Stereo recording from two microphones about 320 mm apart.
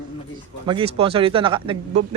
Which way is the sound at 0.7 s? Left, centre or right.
Centre.